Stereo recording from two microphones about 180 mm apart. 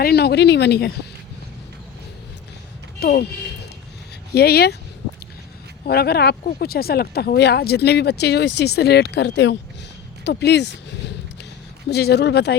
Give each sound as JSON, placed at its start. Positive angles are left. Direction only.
{"t": 0.0, "sound": "speech", "side_deg": 60}
{"t": 3.0, "sound": "speech", "side_deg": 60}
{"t": 5.8, "sound": "speech", "side_deg": 60}